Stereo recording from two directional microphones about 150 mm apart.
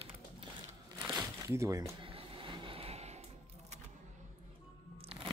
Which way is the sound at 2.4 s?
35° right (ahead or behind).